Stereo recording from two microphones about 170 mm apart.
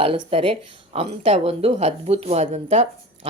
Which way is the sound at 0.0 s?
35° right (ahead or behind).